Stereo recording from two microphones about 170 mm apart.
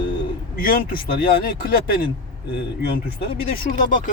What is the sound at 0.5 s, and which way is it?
Speech, 60° left (ahead or behind).